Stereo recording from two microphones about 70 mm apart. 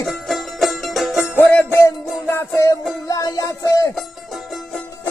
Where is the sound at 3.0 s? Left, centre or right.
Left.